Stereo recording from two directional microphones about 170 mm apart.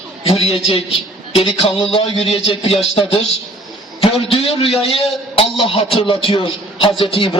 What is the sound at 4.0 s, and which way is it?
A man's voice, 35° left (ahead or behind).